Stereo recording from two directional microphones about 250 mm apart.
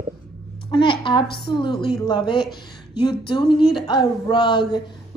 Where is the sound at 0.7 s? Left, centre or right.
Centre.